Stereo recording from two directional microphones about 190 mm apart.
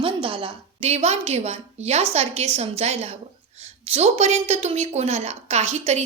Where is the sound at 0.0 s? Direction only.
30° right (ahead or behind).